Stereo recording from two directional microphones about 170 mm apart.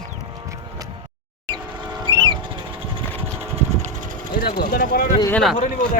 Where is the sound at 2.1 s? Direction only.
30° right (ahead or behind).